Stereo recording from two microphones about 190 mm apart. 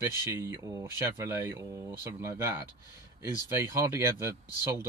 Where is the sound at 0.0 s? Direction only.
15° right (ahead or behind).